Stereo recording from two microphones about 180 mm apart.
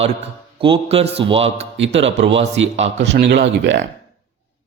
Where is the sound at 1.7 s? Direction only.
90° right.